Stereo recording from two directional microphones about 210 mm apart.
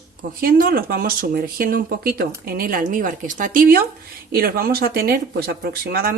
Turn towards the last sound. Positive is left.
turn(degrees=-45)  # may be behind; listen again after turning